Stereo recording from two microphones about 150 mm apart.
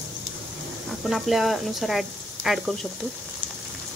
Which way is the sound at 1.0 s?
Centre (ahead or behind).